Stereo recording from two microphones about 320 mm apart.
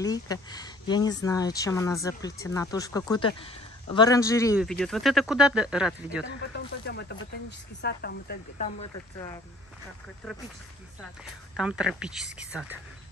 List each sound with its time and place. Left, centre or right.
0.0 s speech: centre
6.9 s speech: left; by 9.4 s centre
11.5 s speech: centre